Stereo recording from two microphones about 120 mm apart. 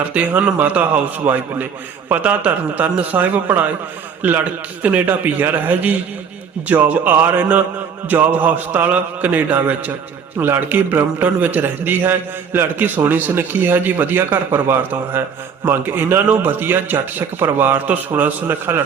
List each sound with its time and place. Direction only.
0.0 s a man's voice: 10° right (ahead or behind)